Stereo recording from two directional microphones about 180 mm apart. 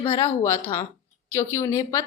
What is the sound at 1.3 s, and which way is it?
Speech, 15° left (ahead or behind).